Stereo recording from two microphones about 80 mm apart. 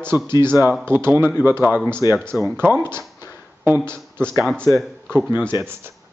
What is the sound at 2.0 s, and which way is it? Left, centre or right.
Speech, left.